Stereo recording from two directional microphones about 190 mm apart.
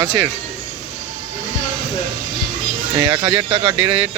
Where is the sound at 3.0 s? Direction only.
25° right (ahead or behind).